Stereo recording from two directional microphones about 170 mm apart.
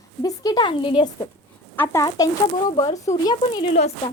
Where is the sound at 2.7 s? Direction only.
30° left (ahead or behind).